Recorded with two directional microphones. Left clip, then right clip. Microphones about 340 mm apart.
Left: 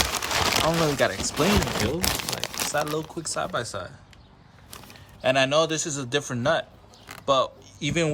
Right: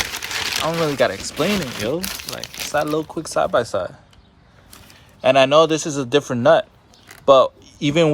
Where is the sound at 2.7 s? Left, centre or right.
Centre.